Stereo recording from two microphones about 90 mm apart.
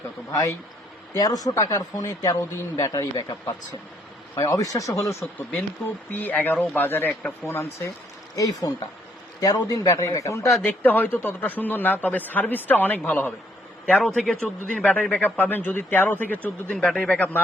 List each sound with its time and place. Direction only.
0.3 s speech: 40° left (ahead or behind)
5.2 s speech: 15° left (ahead or behind)
7.4 s speech: 25° left (ahead or behind)
8.4 s speech: 45° left (ahead or behind)
10.6 s speech: 20° left (ahead or behind)
16.7 s speech: 10° left (ahead or behind)